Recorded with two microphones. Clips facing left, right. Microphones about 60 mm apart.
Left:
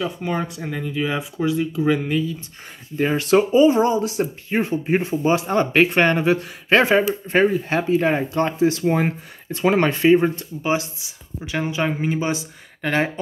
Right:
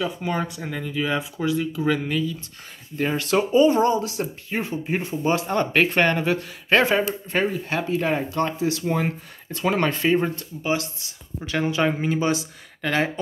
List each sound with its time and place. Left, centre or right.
0.0 s speech: centre
3.0 s speech: left
4.5 s speech: left
5.0 s speech: centre
11.0 s speech: centre